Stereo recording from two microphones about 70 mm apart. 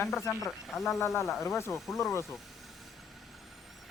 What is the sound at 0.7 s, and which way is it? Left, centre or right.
Speech, centre.